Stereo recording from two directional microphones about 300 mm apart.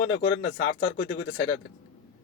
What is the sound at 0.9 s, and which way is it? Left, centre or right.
Speech, left.